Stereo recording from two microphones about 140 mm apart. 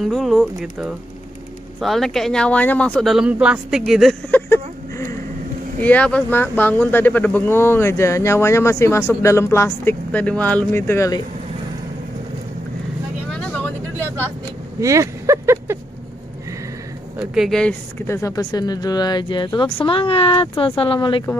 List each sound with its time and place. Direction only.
0.0 s speech: centre (ahead or behind)
4.3 s a sound: 15° left (ahead or behind)
5.8 s speech: 10° left (ahead or behind)
13.3 s vehicle: 10° left (ahead or behind)
14.8 s speech: 20° right (ahead or behind)
17.2 s speech: 5° right (ahead or behind)
18.0 s speech: 20° left (ahead or behind); by 21.2 s 40° left (ahead or behind)